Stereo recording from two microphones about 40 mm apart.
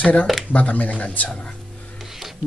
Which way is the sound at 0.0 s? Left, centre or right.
Left.